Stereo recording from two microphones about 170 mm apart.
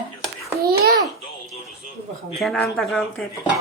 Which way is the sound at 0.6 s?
65° right (ahead or behind).